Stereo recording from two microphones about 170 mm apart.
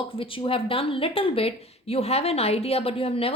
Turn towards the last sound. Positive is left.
turn(degrees=35)  # may be behind; listen again after turning